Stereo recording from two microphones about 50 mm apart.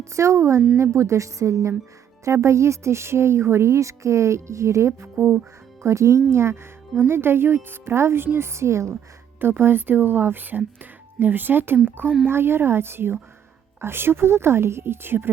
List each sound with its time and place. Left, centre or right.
0.0 s a woman's voice: right
5.1 s a woman's voice: right
5.8 s a woman's voice: right
6.3 s speech: right
7.1 s a woman's voice: right
9.4 s a woman's voice: right